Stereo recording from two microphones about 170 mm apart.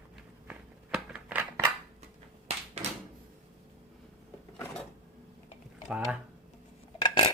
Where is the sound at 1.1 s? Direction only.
10° right (ahead or behind).